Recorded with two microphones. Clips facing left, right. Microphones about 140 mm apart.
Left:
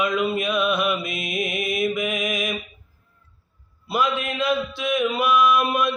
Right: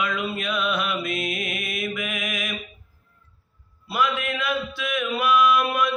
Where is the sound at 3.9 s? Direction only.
20° left (ahead or behind).